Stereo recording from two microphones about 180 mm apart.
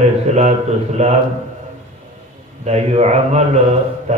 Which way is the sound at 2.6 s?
35° right (ahead or behind).